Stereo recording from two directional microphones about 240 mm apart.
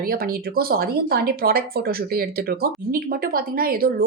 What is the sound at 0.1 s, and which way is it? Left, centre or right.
Speech, right.